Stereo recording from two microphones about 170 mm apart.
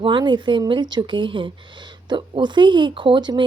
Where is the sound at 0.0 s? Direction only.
25° right (ahead or behind).